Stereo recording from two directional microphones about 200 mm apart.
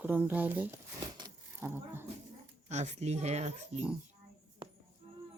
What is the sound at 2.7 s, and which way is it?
Speech, 35° right (ahead or behind).